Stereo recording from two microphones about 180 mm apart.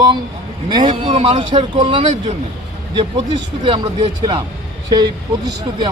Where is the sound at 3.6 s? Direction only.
25° right (ahead or behind).